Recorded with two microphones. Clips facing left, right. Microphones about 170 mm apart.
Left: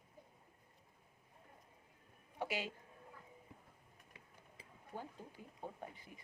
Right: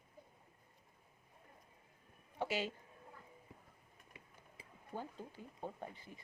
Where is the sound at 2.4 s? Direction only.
30° right (ahead or behind).